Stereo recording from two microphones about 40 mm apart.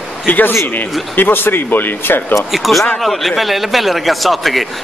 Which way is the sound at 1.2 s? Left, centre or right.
Left.